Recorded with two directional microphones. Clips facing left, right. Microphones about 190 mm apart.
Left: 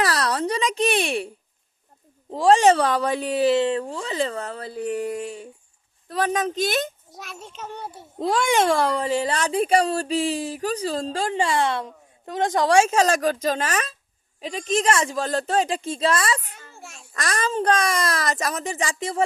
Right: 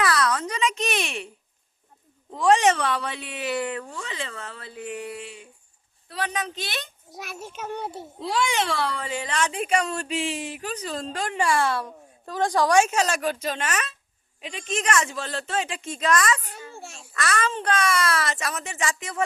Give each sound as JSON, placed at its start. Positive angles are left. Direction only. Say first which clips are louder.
{"t": 0.0, "sound": "a sound", "louder": "left 1 dB", "side_deg": 35}
{"t": 2.3, "sound": "a child's voice", "louder": "left 4 dB", "side_deg": 35}
{"t": 7.2, "sound": "child singing", "louder": "right 2 dB", "side_deg": -5}
{"t": 7.8, "sound": "a child's voice", "louder": "right 3 dB", "side_deg": -25}
{"t": 8.2, "sound": "a child's voice", "louder": "left 5 dB", "side_deg": 45}
{"t": 16.7, "sound": "a child's voice", "louder": "right 3 dB", "side_deg": -30}
{"t": 17.2, "sound": "a child's voice", "louder": "left 2 dB", "side_deg": 35}